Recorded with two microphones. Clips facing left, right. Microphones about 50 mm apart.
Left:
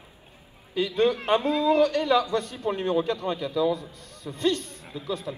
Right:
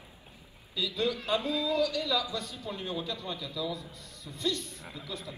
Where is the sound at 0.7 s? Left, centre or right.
Left.